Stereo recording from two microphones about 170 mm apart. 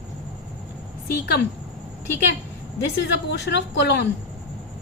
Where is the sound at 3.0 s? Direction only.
85° left.